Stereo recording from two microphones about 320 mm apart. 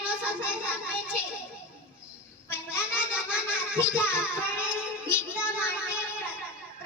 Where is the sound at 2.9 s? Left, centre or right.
Centre.